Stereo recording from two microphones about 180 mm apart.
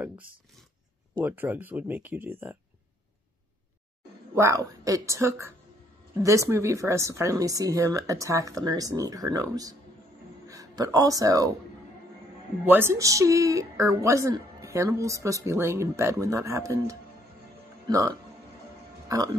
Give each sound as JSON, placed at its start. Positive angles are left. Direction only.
{"t": 1.1, "sound": "a woman's voice", "side_deg": -10}
{"t": 4.4, "sound": "a woman's voice", "side_deg": -15}
{"t": 12.6, "sound": "a woman's voice", "side_deg": -10}